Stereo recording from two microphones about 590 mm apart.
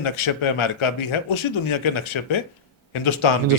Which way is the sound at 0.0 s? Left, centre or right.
Left.